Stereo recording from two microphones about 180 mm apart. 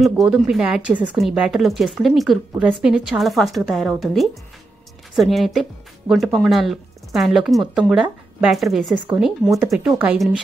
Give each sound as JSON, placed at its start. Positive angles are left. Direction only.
{"t": 0.0, "sound": "speech", "side_deg": 0}